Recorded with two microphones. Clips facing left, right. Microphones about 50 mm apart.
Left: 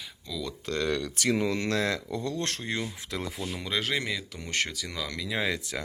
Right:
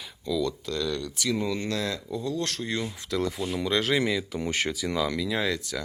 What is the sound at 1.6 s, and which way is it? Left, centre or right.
Speech, left.